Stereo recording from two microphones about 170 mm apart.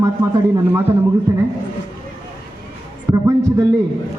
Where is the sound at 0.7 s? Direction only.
15° right (ahead or behind).